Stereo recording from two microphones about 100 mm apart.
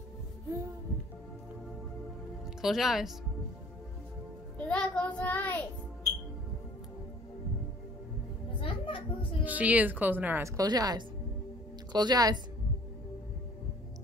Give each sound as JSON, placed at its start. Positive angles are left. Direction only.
{"t": 2.6, "sound": "speech", "side_deg": -5}
{"t": 4.6, "sound": "child singing", "side_deg": 10}
{"t": 8.5, "sound": "children playing", "side_deg": 60}
{"t": 9.4, "sound": "speech", "side_deg": -15}
{"t": 10.4, "sound": "a woman's voice", "side_deg": -35}